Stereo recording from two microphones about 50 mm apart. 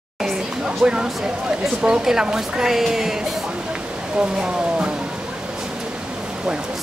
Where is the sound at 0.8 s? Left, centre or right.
Centre.